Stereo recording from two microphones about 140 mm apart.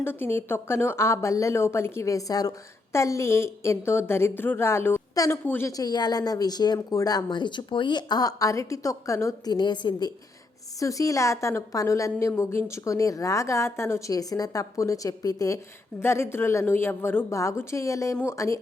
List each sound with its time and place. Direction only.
0.0 s a woman's voice: 15° left (ahead or behind)